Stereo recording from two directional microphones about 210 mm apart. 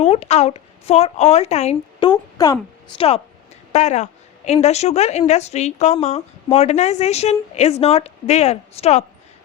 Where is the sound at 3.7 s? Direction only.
35° left (ahead or behind).